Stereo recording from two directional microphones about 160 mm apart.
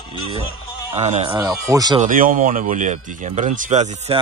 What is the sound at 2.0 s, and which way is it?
Speech, 60° right (ahead or behind).